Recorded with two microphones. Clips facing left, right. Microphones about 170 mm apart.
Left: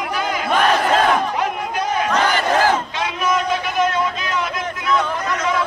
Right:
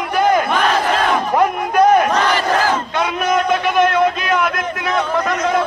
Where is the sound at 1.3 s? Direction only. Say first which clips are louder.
Right 8 dB; 55° right (ahead or behind).